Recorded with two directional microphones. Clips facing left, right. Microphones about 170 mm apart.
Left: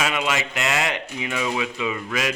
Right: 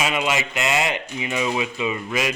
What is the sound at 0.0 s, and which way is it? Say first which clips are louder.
Speech: right 1 dB; 10° right (ahead or behind).